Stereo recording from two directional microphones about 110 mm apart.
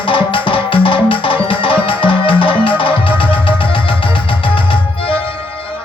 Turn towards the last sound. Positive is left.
turn(degrees=50)  # may be behind; listen again after turning